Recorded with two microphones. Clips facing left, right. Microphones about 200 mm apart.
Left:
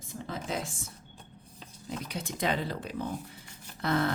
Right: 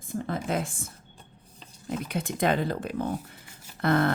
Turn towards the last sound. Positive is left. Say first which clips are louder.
# right 5 dB
turn(degrees=-55)  # may be behind; listen again after turning